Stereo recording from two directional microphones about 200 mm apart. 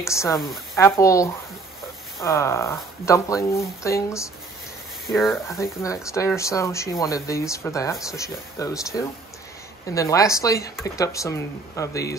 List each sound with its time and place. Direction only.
0.0 s speech: 15° left (ahead or behind)